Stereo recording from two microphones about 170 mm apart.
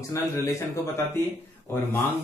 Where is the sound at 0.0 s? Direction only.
15° left (ahead or behind).